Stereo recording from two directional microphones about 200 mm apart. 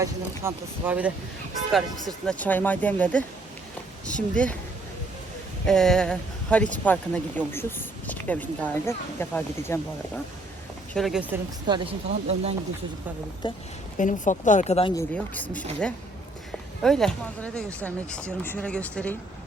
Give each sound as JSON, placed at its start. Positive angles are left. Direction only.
{"t": 0.0, "sound": "speech", "side_deg": -10}
{"t": 2.0, "sound": "speech", "side_deg": 5}
{"t": 5.6, "sound": "speech", "side_deg": 0}
{"t": 10.9, "sound": "speech", "side_deg": 0}
{"t": 11.7, "sound": "speech", "side_deg": -30}
{"t": 13.4, "sound": "speech", "side_deg": 25}
{"t": 14.0, "sound": "speech", "side_deg": 40}
{"t": 14.9, "sound": "speech", "side_deg": 10}